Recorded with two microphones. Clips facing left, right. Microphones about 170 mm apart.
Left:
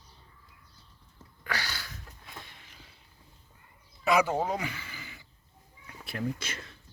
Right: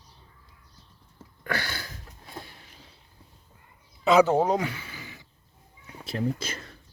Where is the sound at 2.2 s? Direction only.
40° right (ahead or behind).